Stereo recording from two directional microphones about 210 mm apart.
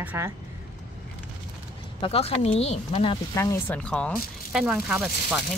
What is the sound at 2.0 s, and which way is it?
Speech, 30° left (ahead or behind).